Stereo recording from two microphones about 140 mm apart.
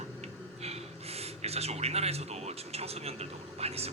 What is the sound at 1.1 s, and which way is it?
Speech, 50° right (ahead or behind).